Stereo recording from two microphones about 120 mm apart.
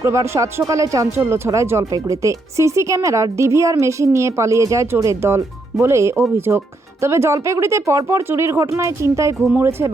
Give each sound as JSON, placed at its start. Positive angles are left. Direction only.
{"t": 0.0, "sound": "speech", "side_deg": -25}